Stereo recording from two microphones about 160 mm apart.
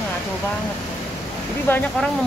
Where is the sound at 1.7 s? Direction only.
15° left (ahead or behind).